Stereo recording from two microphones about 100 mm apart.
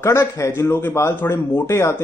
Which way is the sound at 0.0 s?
30° left (ahead or behind).